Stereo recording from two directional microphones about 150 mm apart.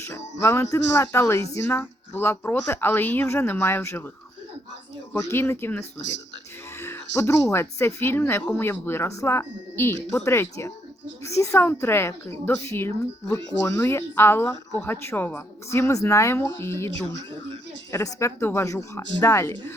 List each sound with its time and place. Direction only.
0.3 s a woman's voice: 20° left (ahead or behind)
5.3 s a woman's voice: 15° left (ahead or behind)
17.9 s speech: 20° left (ahead or behind)